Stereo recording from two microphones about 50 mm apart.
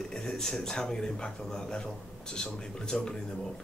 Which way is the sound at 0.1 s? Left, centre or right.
Centre.